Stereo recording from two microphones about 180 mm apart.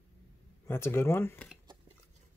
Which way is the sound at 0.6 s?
10° left (ahead or behind).